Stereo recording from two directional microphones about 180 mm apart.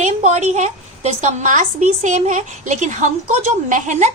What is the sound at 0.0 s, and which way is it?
A woman's voice, 40° right (ahead or behind).